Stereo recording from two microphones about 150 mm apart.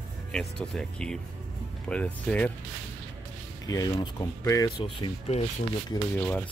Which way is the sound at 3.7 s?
25° left (ahead or behind).